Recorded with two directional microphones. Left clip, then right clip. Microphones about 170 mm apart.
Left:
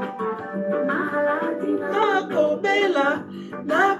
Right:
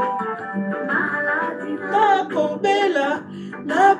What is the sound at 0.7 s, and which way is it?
Music, 20° left (ahead or behind).